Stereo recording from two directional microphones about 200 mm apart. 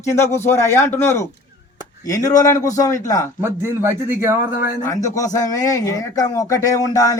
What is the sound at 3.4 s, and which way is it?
A man's voice, 10° right (ahead or behind).